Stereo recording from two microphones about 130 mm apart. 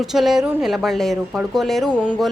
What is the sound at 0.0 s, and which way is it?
A woman's voice, centre (ahead or behind).